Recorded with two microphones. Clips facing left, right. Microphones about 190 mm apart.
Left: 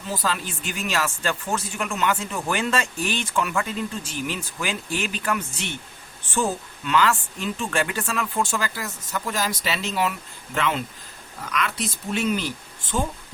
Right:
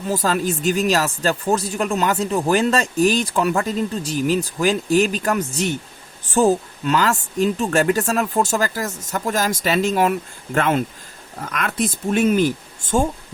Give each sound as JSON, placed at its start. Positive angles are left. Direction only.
{"t": 0.1, "sound": "speech", "side_deg": -45}